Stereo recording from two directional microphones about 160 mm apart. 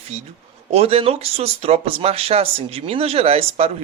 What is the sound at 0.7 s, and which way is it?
Speech, 40° right (ahead or behind).